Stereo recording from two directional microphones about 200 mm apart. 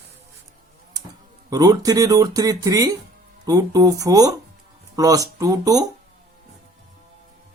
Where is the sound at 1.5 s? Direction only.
20° right (ahead or behind).